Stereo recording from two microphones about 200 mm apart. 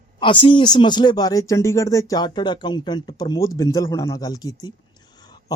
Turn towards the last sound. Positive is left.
turn(degrees=20)  # may be behind; listen again after turning